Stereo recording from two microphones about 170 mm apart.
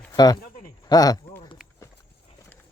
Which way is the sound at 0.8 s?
20° left (ahead or behind).